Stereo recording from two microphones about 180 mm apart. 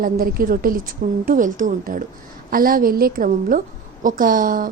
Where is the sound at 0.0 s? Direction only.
55° right (ahead or behind).